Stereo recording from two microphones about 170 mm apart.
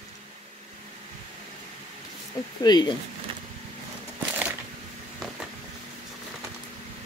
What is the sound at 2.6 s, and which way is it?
Speech, 25° left (ahead or behind).